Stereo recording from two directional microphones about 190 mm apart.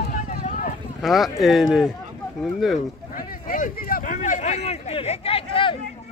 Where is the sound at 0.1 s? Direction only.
45° left (ahead or behind).